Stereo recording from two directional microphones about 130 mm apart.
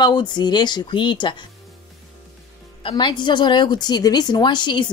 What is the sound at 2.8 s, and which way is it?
A woman's voice, 40° left (ahead or behind).